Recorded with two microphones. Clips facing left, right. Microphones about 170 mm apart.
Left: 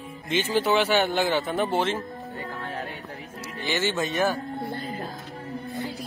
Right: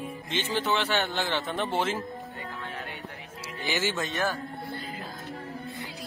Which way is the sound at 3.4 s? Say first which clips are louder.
Left 3 dB; 10° right (ahead or behind).